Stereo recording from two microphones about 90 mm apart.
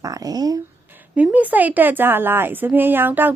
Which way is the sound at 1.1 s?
15° right (ahead or behind).